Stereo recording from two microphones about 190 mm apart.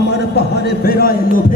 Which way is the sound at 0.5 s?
55° left (ahead or behind).